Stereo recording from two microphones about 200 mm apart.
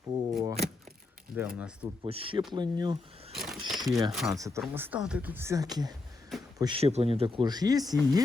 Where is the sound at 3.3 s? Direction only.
Centre (ahead or behind).